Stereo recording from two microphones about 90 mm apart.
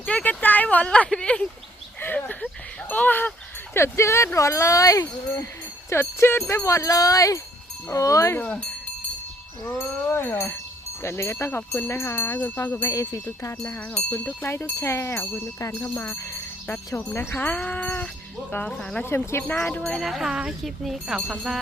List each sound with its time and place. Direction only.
0.0 s speech: 15° left (ahead or behind)
2.0 s a sound: 20° left (ahead or behind)
2.9 s speech: 20° left (ahead or behind); by 8.4 s 35° left (ahead or behind)
9.6 s speech: 30° left (ahead or behind)
12.9 s speech: 35° left (ahead or behind)
13.7 s speech: 15° left (ahead or behind)
14.4 s speech: 30° left (ahead or behind); by 19.0 s 10° left (ahead or behind)
19.0 s speech: 30° left (ahead or behind)
19.5 s speech: 15° left (ahead or behind)
19.8 s speech: 5° left (ahead or behind)